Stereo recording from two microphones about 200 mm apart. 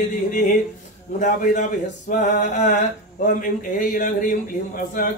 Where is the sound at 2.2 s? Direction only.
40° left (ahead or behind).